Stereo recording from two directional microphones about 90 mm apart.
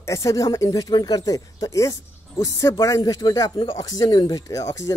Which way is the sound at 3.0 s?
45° left (ahead or behind).